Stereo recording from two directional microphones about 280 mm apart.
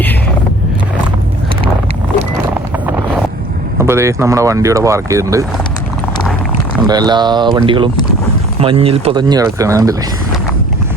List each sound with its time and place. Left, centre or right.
3.8 s speech: centre
6.8 s speech: centre